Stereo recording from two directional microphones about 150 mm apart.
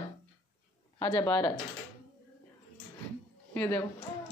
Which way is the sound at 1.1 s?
10° left (ahead or behind).